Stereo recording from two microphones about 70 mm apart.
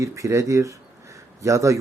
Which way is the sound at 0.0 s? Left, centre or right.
Right.